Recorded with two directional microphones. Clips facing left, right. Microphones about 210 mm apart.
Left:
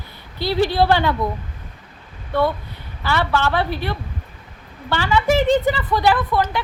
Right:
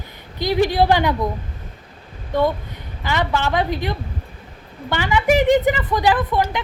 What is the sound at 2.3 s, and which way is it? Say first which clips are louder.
A woman's voice: right 1 dB; 15° right (ahead or behind).